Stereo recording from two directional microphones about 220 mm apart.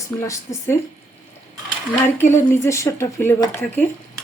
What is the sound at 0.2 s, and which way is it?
Speech, 10° left (ahead or behind).